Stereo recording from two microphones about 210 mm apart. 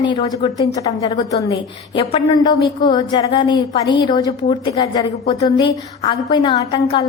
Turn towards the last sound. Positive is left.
turn(degrees=25)  # may be behind; listen again after turning